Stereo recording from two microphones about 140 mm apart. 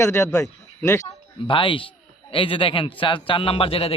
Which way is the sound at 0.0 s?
20° left (ahead or behind).